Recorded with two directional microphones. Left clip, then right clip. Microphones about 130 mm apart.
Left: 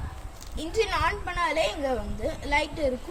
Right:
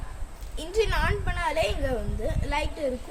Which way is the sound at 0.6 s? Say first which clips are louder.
Left 1 dB; 15° right (ahead or behind).